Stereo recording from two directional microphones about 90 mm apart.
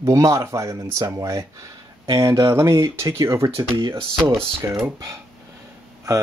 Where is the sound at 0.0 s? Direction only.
35° right (ahead or behind).